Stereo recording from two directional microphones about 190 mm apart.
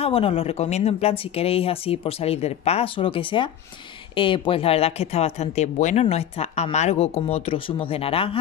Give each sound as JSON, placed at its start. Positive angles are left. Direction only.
{"t": 0.0, "sound": "speech", "side_deg": 30}